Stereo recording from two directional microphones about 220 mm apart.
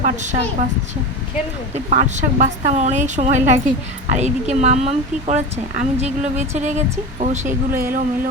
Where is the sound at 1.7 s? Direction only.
35° right (ahead or behind).